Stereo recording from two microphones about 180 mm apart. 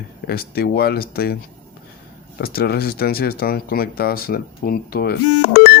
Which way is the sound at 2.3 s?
60° left (ahead or behind).